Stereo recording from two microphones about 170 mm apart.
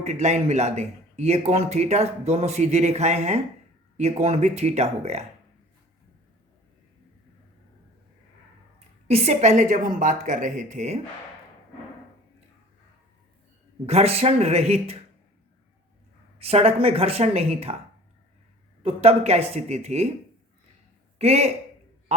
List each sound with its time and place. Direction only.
0.0 s speech: 40° right (ahead or behind)
9.0 s a woman's voice: 40° right (ahead or behind)
13.8 s speech: 40° right (ahead or behind)
16.4 s speech: 35° right (ahead or behind)
18.8 s speech: 35° right (ahead or behind)
21.2 s speech: 40° right (ahead or behind)